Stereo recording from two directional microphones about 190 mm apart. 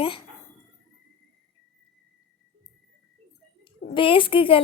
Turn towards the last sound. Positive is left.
turn(degrees=30)  # may be behind; listen again after turning